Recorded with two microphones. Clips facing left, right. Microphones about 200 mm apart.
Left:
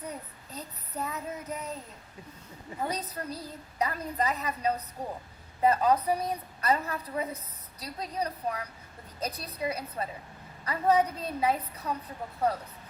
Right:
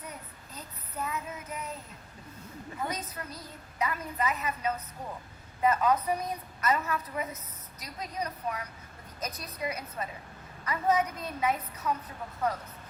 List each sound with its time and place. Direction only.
0.0 s child singing: 35° left (ahead or behind)
2.8 s a woman's voice: 35° left (ahead or behind)